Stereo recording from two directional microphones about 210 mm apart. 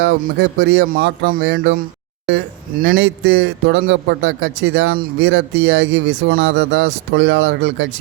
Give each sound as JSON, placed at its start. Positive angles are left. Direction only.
{"t": 0.0, "sound": "a man's voice", "side_deg": -55}
{"t": 2.2, "sound": "a man's voice", "side_deg": -55}